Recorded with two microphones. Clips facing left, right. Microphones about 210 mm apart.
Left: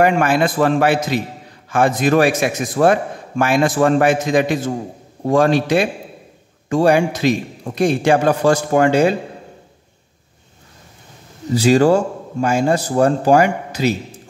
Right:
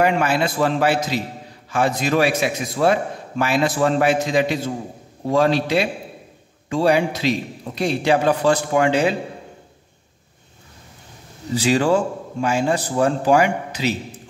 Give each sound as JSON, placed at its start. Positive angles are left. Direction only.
{"t": 0.0, "sound": "a man's voice", "side_deg": 50}
{"t": 11.5, "sound": "a man's voice", "side_deg": 40}